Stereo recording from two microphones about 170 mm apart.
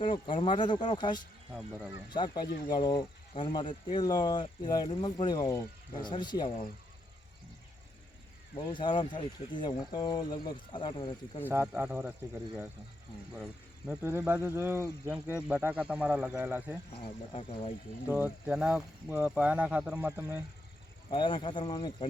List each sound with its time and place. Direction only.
0.0 s speech: 30° left (ahead or behind)
1.5 s speech: centre (ahead or behind)
2.0 s speech: 25° left (ahead or behind)
8.5 s speech: 25° left (ahead or behind)
11.4 s speech: 10° right (ahead or behind)
13.3 s speech: 5° right (ahead or behind)
16.9 s speech: 35° left (ahead or behind)
18.1 s speech: 10° right (ahead or behind)
21.1 s speech: 30° left (ahead or behind)